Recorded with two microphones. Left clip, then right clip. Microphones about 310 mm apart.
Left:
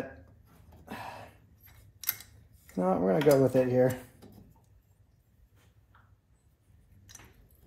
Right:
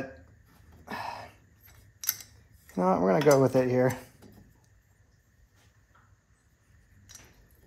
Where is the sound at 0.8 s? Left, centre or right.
Right.